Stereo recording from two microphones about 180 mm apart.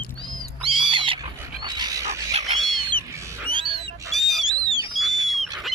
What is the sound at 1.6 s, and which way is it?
Dog, 25° right (ahead or behind).